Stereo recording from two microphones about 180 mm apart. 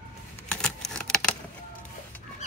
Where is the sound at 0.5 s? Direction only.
5° left (ahead or behind).